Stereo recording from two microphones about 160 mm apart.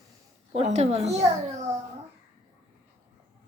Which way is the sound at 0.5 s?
45° right (ahead or behind).